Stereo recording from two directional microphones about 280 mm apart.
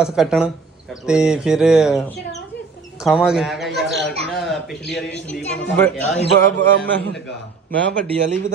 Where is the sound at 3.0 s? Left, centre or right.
Centre.